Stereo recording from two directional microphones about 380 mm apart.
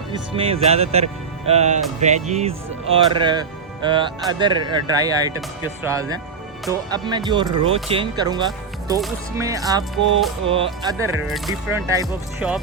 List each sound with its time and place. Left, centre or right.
0.1 s speech: centre
10.8 s speech: centre